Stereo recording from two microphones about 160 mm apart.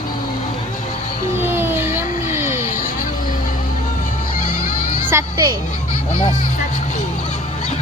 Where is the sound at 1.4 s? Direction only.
15° right (ahead or behind).